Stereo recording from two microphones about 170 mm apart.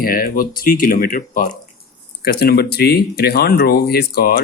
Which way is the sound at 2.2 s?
65° left (ahead or behind).